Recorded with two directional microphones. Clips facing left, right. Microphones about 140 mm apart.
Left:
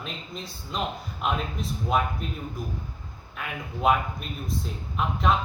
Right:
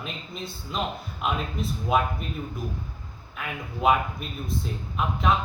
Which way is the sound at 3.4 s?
Centre (ahead or behind).